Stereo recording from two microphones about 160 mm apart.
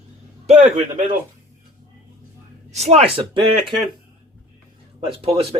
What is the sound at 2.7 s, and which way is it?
Speech, 40° right (ahead or behind).